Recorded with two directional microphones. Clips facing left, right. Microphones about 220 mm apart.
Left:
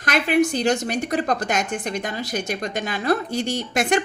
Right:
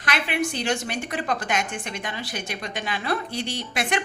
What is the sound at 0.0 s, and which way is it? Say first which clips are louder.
A woman's voice: left 7 dB; 45° left (ahead or behind).